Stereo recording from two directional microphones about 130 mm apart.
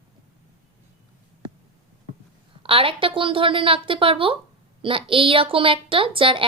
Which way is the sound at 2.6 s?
45° right (ahead or behind).